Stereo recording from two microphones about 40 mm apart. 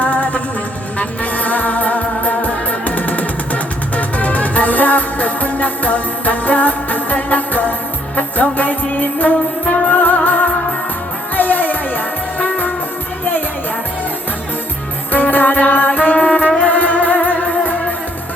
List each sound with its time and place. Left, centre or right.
0.0 s music: left
15.1 s music: left
16.6 s music: left